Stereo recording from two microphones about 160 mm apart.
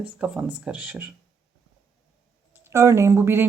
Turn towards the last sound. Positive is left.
turn(degrees=-15)  # may be behind; listen again after turning